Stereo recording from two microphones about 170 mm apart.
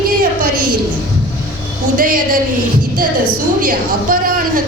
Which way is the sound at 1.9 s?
55° right (ahead or behind).